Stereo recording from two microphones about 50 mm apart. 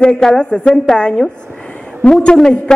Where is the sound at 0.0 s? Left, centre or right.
Centre.